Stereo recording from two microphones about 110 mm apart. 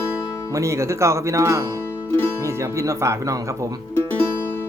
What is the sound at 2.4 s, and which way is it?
Speech, 25° right (ahead or behind).